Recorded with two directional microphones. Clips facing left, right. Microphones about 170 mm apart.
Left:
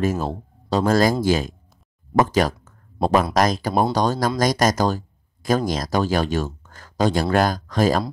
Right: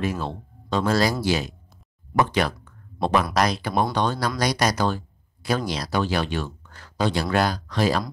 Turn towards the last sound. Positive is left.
turn(degrees=45)  # may be behind; listen again after turning